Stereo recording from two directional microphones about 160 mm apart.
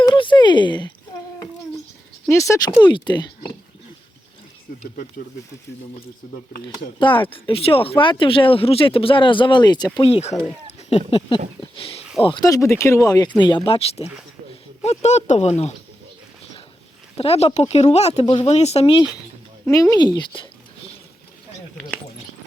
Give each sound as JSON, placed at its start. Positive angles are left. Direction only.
{"t": 0.1, "sound": "a sound", "side_deg": 30}
{"t": 2.3, "sound": "speech", "side_deg": 20}
{"t": 7.0, "sound": "speech", "side_deg": 30}
{"t": 17.2, "sound": "speech", "side_deg": 40}
{"t": 19.7, "sound": "speech", "side_deg": 20}